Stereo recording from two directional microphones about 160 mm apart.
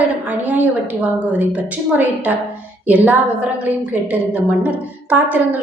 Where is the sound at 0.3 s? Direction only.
10° right (ahead or behind).